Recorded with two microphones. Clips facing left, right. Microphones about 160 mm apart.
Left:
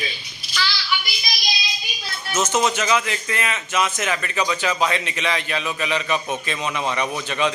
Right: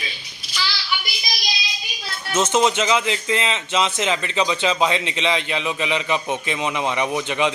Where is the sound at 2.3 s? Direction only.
25° right (ahead or behind).